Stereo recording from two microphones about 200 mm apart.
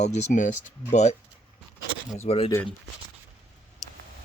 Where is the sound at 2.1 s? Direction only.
30° left (ahead or behind).